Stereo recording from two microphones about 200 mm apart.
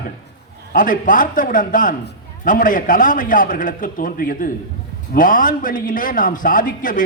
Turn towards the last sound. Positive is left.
turn(degrees=40)  # may be behind; listen again after turning